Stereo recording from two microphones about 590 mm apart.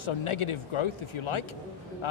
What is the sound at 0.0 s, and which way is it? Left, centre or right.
Speech, left.